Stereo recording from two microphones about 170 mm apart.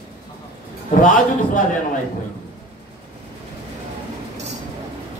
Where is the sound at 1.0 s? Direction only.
50° left (ahead or behind).